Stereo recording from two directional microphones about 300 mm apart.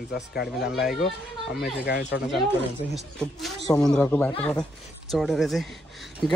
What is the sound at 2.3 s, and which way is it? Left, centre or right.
Speech, centre.